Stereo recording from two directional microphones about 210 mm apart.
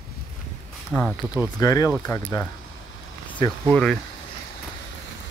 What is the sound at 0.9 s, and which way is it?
Speech, centre (ahead or behind).